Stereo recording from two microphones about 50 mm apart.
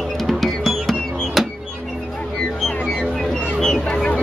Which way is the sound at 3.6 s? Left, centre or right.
Centre.